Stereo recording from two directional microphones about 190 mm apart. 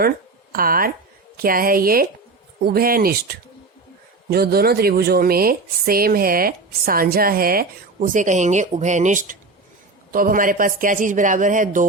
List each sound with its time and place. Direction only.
0.5 s speech: 50° right (ahead or behind)